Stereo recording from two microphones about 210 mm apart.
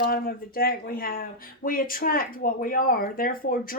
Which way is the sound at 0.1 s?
45° left (ahead or behind).